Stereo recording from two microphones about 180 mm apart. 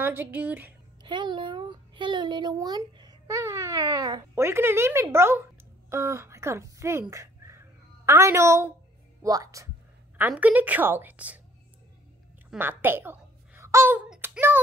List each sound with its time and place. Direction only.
0.0 s a woman's voice: 10° right (ahead or behind)
1.0 s a child's voice: 25° right (ahead or behind); by 11.4 s 10° right (ahead or behind)
12.4 s a sound: 10° right (ahead or behind)